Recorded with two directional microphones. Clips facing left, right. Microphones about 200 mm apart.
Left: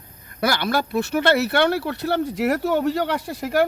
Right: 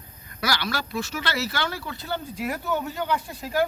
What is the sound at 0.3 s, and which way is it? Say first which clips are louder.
Speech: left 6 dB; 55° left (ahead or behind).